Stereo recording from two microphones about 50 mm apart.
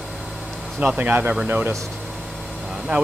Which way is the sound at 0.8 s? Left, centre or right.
Right.